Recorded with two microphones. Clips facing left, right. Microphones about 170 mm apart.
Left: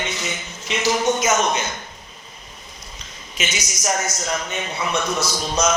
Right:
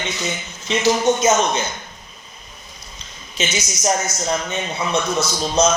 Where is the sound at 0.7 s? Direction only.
25° right (ahead or behind).